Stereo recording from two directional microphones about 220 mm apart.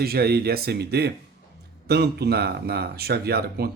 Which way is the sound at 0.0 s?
45° right (ahead or behind).